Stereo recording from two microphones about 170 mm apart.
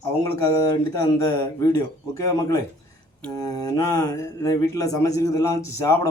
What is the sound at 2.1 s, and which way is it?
Speech, 20° left (ahead or behind).